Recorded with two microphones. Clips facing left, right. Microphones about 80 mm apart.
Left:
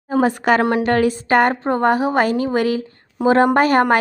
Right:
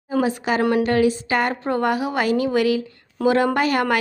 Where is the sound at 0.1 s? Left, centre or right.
Left.